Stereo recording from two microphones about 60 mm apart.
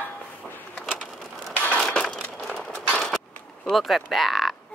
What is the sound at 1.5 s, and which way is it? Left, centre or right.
Crushing, left.